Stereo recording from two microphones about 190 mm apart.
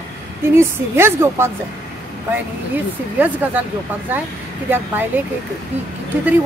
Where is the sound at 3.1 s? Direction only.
10° right (ahead or behind).